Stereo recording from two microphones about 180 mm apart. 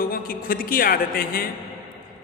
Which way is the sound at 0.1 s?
55° left (ahead or behind).